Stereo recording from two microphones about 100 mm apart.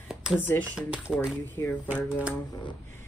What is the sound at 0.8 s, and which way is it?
Speech, 10° right (ahead or behind).